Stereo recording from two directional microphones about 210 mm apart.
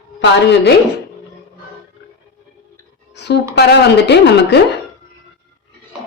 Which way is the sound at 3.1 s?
55° left (ahead or behind).